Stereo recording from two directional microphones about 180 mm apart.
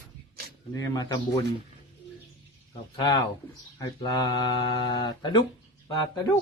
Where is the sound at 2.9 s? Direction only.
25° left (ahead or behind).